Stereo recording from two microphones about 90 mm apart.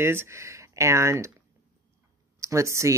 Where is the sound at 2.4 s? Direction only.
35° right (ahead or behind).